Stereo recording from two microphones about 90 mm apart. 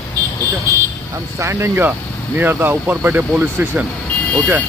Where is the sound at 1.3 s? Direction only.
30° right (ahead or behind).